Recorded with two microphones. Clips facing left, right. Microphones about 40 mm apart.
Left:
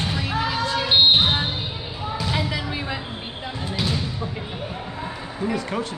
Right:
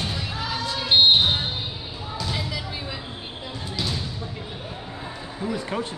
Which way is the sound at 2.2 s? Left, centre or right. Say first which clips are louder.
Left 4 dB; left.